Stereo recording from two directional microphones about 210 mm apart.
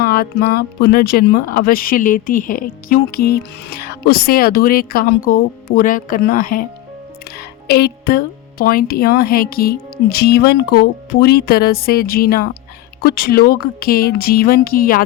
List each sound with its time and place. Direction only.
0.0 s speech: 45° left (ahead or behind)